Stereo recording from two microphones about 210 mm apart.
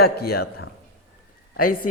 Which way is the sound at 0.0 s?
50° left (ahead or behind).